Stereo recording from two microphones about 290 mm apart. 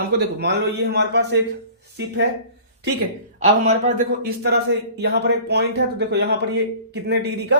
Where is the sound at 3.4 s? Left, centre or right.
Right.